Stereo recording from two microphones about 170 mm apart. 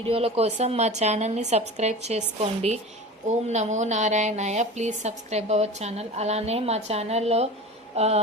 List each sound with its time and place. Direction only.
0.1 s a woman's voice: 35° right (ahead or behind)